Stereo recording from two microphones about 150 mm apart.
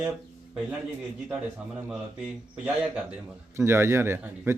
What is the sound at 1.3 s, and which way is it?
A man's voice, 10° right (ahead or behind).